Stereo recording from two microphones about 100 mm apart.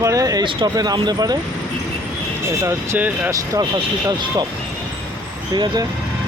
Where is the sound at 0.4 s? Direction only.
45° right (ahead or behind).